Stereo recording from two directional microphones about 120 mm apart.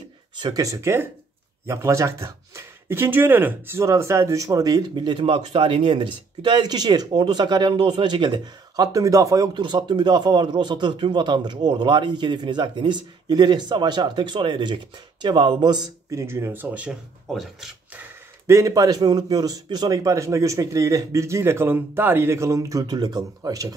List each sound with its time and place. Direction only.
0.4 s a man's voice: 30° right (ahead or behind)
17.3 s speech: centre (ahead or behind)
18.5 s a man's voice: 30° right (ahead or behind)